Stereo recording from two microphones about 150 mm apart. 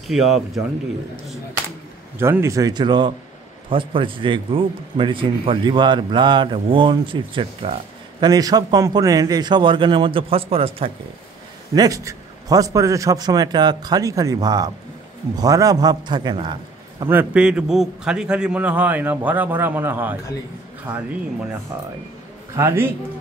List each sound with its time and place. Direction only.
0.0 s speech: centre (ahead or behind)
2.1 s a man's voice: 15° right (ahead or behind); by 10.9 s 40° right (ahead or behind)
11.7 s a man's voice: 25° right (ahead or behind)
17.1 s a man's voice: 10° right (ahead or behind)
22.6 s a man's voice: 15° right (ahead or behind)